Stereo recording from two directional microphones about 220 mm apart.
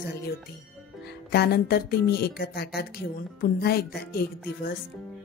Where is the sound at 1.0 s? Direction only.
50° left (ahead or behind).